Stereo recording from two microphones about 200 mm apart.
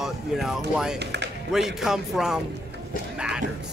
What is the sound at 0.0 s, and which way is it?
Speech, centre (ahead or behind).